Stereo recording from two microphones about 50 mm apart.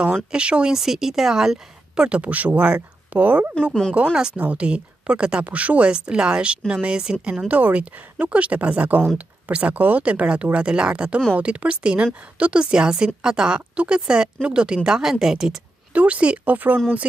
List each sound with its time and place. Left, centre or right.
0.0 s speech: right
0.7 s a woman's voice: centre
2.0 s speech: right
4.1 s a woman's voice: centre
15.9 s speech: right